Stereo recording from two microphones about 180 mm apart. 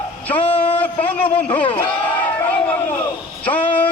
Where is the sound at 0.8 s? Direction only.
10° left (ahead or behind).